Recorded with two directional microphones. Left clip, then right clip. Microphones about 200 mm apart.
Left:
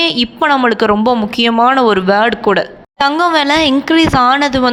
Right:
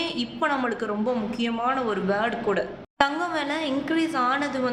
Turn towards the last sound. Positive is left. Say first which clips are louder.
# left 13 dB
turn(degrees=45)  # may be behind; listen again after turning